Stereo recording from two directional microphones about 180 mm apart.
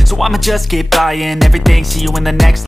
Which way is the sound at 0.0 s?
Centre (ahead or behind).